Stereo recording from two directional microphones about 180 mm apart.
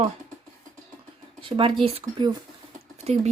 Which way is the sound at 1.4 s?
30° right (ahead or behind).